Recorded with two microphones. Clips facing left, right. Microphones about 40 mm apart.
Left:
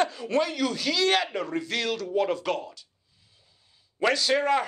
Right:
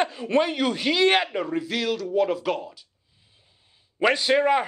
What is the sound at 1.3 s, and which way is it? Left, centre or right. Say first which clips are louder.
A man's voice: right 2 dB; centre.